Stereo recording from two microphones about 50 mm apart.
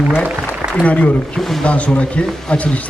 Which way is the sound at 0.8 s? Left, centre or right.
Left.